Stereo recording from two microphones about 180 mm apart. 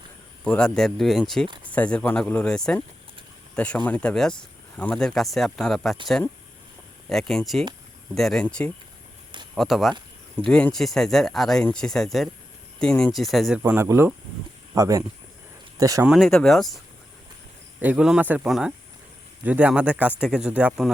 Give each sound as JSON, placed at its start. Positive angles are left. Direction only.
{"t": 0.4, "sound": "speech", "side_deg": 5}
{"t": 7.1, "sound": "speech", "side_deg": 0}
{"t": 13.6, "sound": "speech", "side_deg": -15}
{"t": 16.0, "sound": "speech", "side_deg": 0}